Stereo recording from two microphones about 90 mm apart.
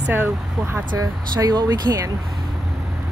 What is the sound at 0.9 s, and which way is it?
Speech, 45° right (ahead or behind).